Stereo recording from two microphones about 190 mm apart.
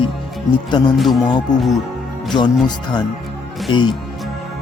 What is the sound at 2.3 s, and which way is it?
Speech, 25° left (ahead or behind).